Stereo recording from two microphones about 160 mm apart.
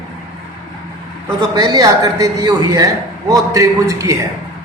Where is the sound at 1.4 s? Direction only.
25° right (ahead or behind).